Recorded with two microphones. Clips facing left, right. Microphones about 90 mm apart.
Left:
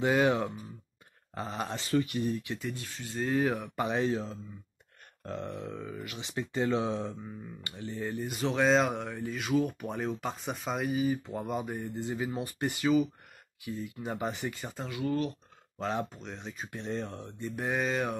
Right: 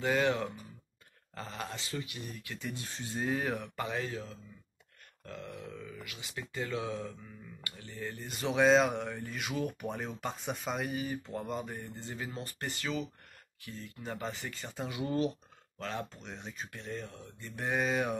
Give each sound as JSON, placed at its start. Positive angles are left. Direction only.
{"t": 0.0, "sound": "speech", "side_deg": 15}
{"t": 1.8, "sound": "speech", "side_deg": 55}
{"t": 2.3, "sound": "speech", "side_deg": 20}
{"t": 2.7, "sound": "speech", "side_deg": -25}
{"t": 3.2, "sound": "speech", "side_deg": 0}
{"t": 3.7, "sound": "speech", "side_deg": 20}
{"t": 8.3, "sound": "speech", "side_deg": 0}
{"t": 14.9, "sound": "speech", "side_deg": -20}
{"t": 15.8, "sound": "speech", "side_deg": 20}
{"t": 16.2, "sound": "speech", "side_deg": 0}
{"t": 16.7, "sound": "speech", "side_deg": 25}
{"t": 17.0, "sound": "speech", "side_deg": 35}
{"t": 17.6, "sound": "speech", "side_deg": 0}